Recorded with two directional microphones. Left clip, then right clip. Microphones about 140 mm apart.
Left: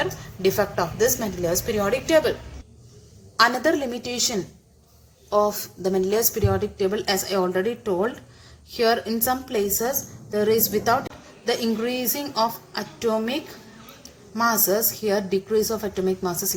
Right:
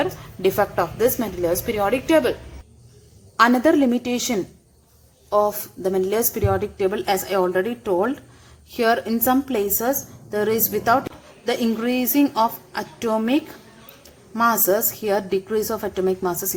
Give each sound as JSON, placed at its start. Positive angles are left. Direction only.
{"t": 0.0, "sound": "a woman's voice", "side_deg": -40}
{"t": 3.3, "sound": "a woman's voice", "side_deg": -35}
{"t": 5.3, "sound": "a woman's voice", "side_deg": -25}